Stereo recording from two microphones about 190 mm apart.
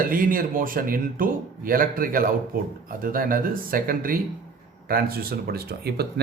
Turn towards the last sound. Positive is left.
turn(degrees=-55)  # may be behind; listen again after turning